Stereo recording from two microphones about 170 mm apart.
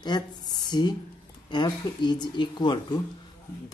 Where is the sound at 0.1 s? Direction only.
25° left (ahead or behind).